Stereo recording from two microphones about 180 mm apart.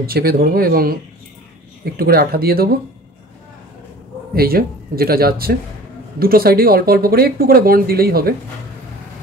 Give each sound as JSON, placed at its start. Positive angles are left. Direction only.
{"t": 0.0, "sound": "speech", "side_deg": -55}
{"t": 2.0, "sound": "speech", "side_deg": -55}
{"t": 4.4, "sound": "speech", "side_deg": -55}